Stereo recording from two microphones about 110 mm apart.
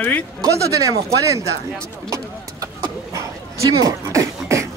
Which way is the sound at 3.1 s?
30° right (ahead or behind).